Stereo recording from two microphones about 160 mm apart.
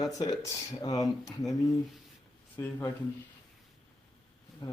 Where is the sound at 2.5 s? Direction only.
15° left (ahead or behind).